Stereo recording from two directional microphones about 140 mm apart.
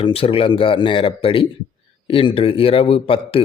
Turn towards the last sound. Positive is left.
turn(degrees=40)  # may be behind; listen again after turning